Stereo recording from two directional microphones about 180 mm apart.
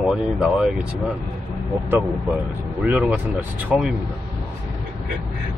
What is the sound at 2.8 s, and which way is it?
Speech, 5° right (ahead or behind).